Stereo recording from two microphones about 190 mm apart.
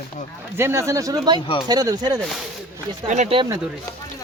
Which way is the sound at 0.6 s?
15° right (ahead or behind).